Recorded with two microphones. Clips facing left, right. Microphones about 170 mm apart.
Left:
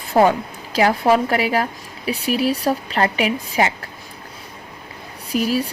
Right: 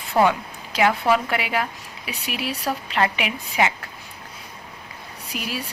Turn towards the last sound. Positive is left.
turn(degrees=40)  # may be behind; listen again after turning